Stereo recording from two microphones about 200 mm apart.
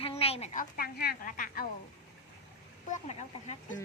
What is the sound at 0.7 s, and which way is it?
Speech, 50° left (ahead or behind).